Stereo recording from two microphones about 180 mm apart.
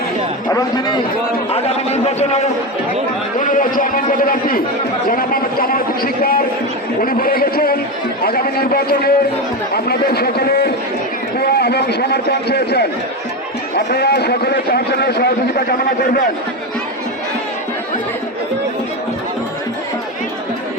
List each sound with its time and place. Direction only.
1.5 s a man's voice: 35° left (ahead or behind)
3.3 s a man's voice: 45° left (ahead or behind)
7.0 s a sound: 55° left (ahead or behind)
8.2 s a man's voice: 55° left (ahead or behind)